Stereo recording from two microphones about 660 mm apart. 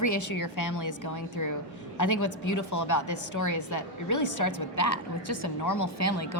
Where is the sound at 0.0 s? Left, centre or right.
Left.